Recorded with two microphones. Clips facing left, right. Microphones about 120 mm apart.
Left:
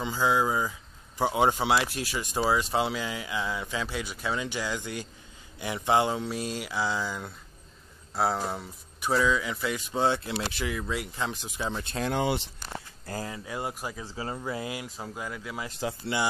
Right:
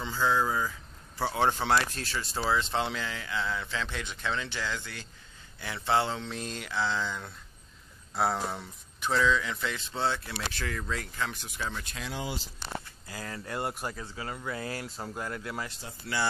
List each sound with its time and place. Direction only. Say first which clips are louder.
0.0 s speech: left 2 dB; 15° left (ahead or behind)
11.7 s speech: left 6 dB; 30° left (ahead or behind)
12.0 s speech: left 10 dB; 65° left (ahead or behind)
12.5 s a sound: right 1 dB; 45° left (ahead or behind)
13.3 s speech: even; 5° left (ahead or behind)
14.0 s speech: left 3 dB; 30° left (ahead or behind)
15.0 s speech: even; centre (ahead or behind)
15.8 s speech: left 13 dB; 90° left